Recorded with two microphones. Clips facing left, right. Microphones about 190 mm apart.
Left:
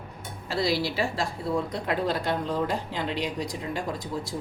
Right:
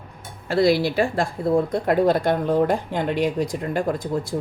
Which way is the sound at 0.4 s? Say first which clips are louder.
Right 8 dB; 55° right (ahead or behind).